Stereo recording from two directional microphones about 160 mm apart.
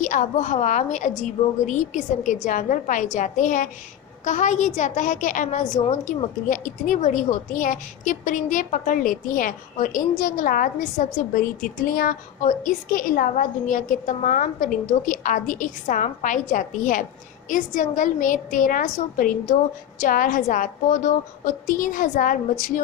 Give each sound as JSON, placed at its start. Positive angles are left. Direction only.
{"t": 0.0, "sound": "a woman's voice", "side_deg": 50}